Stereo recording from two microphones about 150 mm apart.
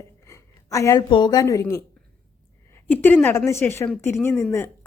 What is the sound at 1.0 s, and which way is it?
Speech, 30° left (ahead or behind).